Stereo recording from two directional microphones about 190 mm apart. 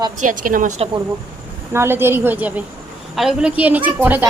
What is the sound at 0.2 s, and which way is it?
Speech, 45° right (ahead or behind).